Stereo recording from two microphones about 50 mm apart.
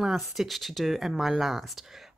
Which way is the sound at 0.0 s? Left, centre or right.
Centre.